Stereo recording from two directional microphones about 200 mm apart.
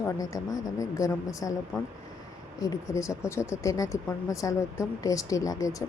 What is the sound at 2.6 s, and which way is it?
Speech, 15° left (ahead or behind).